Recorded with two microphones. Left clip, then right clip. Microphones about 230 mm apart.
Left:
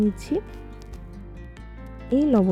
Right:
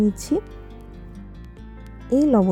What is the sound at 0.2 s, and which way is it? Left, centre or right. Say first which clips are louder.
Speech: right 3 dB; centre.